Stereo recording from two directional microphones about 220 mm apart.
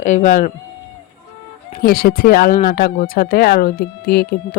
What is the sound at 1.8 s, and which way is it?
Speech, 40° left (ahead or behind).